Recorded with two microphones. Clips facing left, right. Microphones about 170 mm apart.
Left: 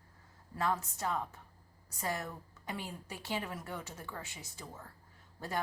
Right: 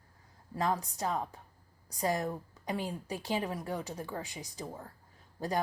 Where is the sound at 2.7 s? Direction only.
15° right (ahead or behind).